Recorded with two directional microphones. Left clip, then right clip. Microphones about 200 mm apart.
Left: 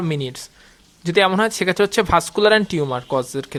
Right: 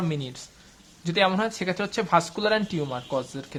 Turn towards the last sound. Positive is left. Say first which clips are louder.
# left 8 dB
turn(degrees=40)  # may be behind; listen again after turning